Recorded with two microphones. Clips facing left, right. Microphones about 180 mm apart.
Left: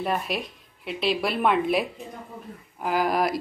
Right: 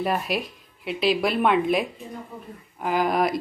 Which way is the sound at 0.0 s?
Centre (ahead or behind).